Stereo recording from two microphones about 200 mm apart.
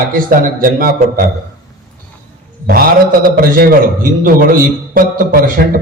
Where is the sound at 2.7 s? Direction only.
45° right (ahead or behind).